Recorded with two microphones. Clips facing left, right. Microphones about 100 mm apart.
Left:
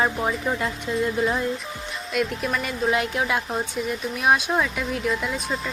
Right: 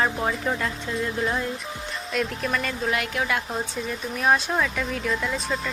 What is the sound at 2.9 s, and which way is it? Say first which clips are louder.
Speech: left 3 dB; 20° left (ahead or behind).